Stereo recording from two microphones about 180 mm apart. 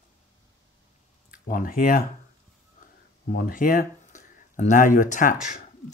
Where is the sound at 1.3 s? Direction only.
50° left (ahead or behind).